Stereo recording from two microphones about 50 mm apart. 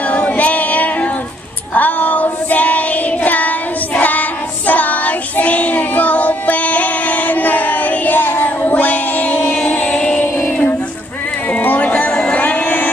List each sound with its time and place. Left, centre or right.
0.1 s female singing: left
3.3 s child singing: left
9.6 s music: left
10.2 s music: left